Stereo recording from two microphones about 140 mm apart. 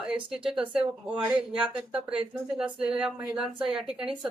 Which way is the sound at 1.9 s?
40° right (ahead or behind).